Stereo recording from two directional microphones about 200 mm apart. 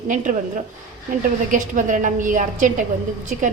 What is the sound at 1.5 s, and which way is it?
A woman's voice, 40° right (ahead or behind).